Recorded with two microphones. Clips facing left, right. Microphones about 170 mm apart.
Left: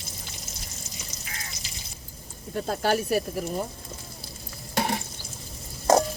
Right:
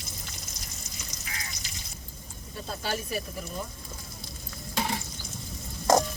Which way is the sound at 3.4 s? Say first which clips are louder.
Left 7 dB; 40° left (ahead or behind).